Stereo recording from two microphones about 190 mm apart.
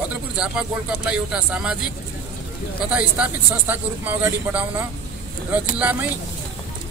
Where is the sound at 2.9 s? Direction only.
5° right (ahead or behind).